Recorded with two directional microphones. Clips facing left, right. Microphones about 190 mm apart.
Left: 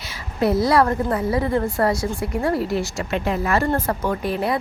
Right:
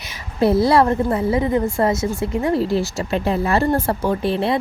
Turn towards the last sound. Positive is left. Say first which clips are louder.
# right 3 dB
turn(degrees=-30)  # may be behind; listen again after turning